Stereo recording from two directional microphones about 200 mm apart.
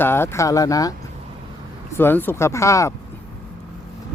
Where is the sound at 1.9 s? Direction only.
10° left (ahead or behind).